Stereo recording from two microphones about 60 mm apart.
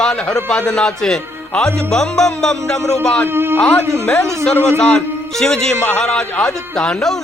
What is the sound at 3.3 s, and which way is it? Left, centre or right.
Speech, right.